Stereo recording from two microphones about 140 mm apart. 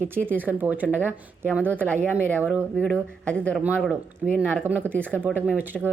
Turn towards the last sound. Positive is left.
turn(degrees=-10)  # may be behind; listen again after turning